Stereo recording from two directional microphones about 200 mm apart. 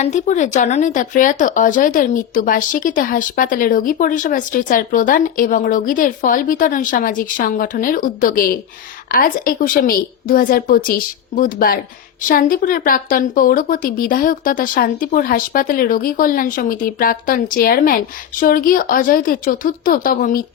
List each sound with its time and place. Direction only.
0.0 s speech: 35° left (ahead or behind)